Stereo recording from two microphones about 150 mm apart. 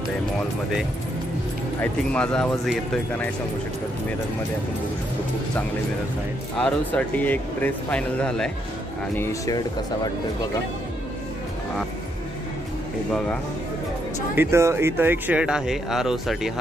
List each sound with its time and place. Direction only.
1.8 s speech: 5° left (ahead or behind)
6.6 s speech: 10° left (ahead or behind)
9.1 s speech: 20° left (ahead or behind)
14.3 s speech: 15° right (ahead or behind)